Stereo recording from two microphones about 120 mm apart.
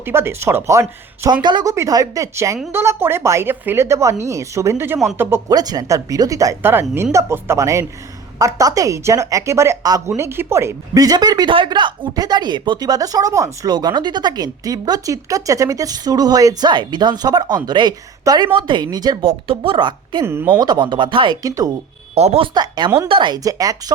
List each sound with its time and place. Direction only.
0.0 s speech: 20° right (ahead or behind)
1.3 s speech: 40° right (ahead or behind)
1.7 s speech: 25° right (ahead or behind)
5.5 s speech: 30° right (ahead or behind)
19.2 s a woman's voice: 50° right (ahead or behind)
20.2 s speech: 20° right (ahead or behind)
20.6 s speech: 35° right (ahead or behind)
21.4 s speech: 30° right (ahead or behind)
22.1 s speech: 60° right (ahead or behind)
22.5 s speech: 35° right (ahead or behind)